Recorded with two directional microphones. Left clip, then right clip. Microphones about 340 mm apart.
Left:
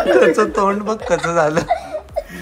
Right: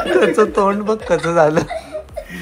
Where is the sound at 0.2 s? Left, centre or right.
Centre.